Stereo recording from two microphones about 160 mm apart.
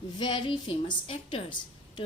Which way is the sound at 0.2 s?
30° left (ahead or behind).